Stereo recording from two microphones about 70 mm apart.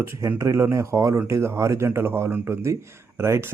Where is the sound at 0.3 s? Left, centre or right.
Right.